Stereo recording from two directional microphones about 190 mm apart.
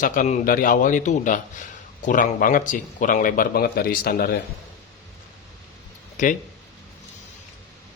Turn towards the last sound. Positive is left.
turn(degrees=40)  # may be behind; listen again after turning